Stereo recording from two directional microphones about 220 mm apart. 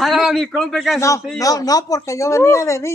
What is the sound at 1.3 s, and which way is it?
A man's voice, 15° left (ahead or behind).